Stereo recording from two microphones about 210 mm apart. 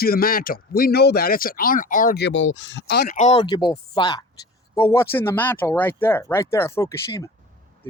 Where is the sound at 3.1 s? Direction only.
35° left (ahead or behind).